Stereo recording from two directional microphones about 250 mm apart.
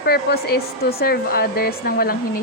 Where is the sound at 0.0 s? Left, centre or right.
Left.